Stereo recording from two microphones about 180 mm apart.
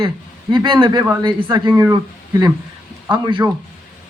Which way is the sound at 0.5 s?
25° right (ahead or behind).